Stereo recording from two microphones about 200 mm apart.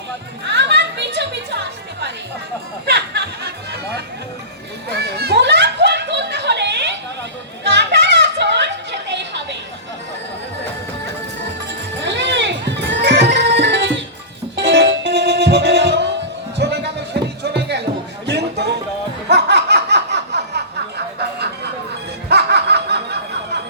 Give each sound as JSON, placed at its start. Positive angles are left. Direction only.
{"t": 0.4, "sound": "music", "side_deg": -60}
{"t": 4.9, "sound": "a sound", "side_deg": -55}
{"t": 11.7, "sound": "music", "side_deg": -60}
{"t": 16.6, "sound": "a sound", "side_deg": -55}
{"t": 17.4, "sound": "music", "side_deg": -55}
{"t": 19.3, "sound": "laughter", "side_deg": -55}
{"t": 22.3, "sound": "snicker", "side_deg": -55}